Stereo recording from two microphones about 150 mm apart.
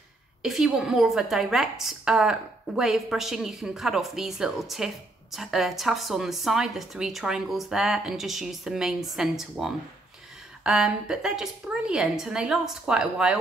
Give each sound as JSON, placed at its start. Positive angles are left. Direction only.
{"t": 0.4, "sound": "a woman's voice", "side_deg": 0}